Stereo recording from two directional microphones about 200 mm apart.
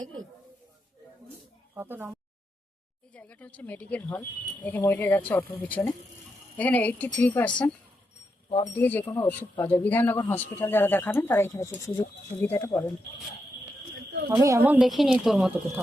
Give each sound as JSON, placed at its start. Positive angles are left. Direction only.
{"t": 1.7, "sound": "speech", "side_deg": -10}
{"t": 3.1, "sound": "speech", "side_deg": 5}
{"t": 8.4, "sound": "speech", "side_deg": 25}
{"t": 8.7, "sound": "speech", "side_deg": 10}
{"t": 14.3, "sound": "speech", "side_deg": -15}